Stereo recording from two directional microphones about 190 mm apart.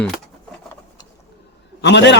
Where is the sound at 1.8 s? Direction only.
65° left (ahead or behind).